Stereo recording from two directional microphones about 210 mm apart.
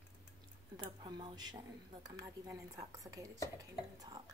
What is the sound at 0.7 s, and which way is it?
A woman's voice, 20° right (ahead or behind).